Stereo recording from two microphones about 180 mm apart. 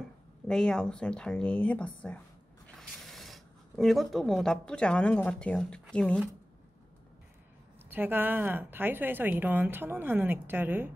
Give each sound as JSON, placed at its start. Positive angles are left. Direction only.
{"t": 0.5, "sound": "speech", "side_deg": 5}
{"t": 7.9, "sound": "speech", "side_deg": -10}